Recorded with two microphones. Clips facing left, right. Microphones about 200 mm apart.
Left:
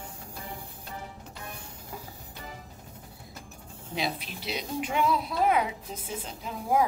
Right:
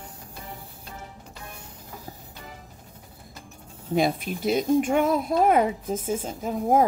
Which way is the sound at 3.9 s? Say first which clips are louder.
Right 9 dB; 50° right (ahead or behind).